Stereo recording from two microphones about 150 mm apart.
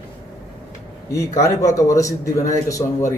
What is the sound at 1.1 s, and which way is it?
A man's voice, 20° left (ahead or behind).